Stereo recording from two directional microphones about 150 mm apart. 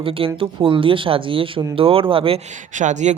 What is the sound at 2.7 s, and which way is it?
Speech, 55° right (ahead or behind).